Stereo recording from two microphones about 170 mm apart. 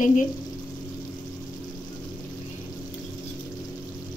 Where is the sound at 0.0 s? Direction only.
50° left (ahead or behind).